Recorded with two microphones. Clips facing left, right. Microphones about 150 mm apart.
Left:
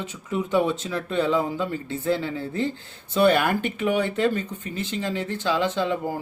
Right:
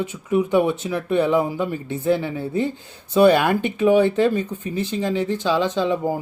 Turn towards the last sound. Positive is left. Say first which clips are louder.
# right 4 dB
turn(degrees=-15)  # may be behind; listen again after turning